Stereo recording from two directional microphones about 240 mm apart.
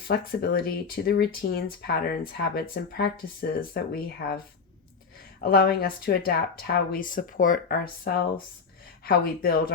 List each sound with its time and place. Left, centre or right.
0.1 s speech: left
5.4 s speech: left